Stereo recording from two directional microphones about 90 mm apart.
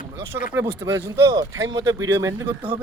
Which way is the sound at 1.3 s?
40° right (ahead or behind).